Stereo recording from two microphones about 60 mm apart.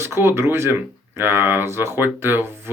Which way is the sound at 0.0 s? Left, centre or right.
Right.